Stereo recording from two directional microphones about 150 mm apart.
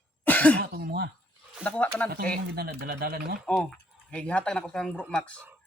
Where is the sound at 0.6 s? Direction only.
90° right.